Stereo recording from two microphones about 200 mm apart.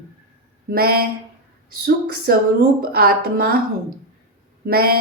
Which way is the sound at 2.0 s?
50° right (ahead or behind).